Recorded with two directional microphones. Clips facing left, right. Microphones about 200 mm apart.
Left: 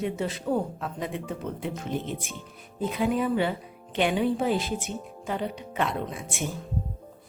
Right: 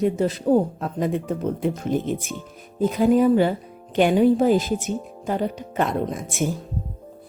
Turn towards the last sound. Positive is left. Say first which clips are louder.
# right 7 dB
turn(degrees=-40)  # may be behind; listen again after turning